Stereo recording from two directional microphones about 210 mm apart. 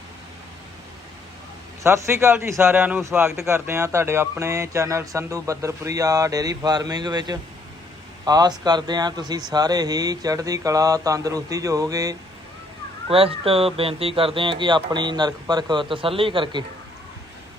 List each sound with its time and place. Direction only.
1.8 s a man's voice: 15° right (ahead or behind)
13.1 s speech: 25° right (ahead or behind)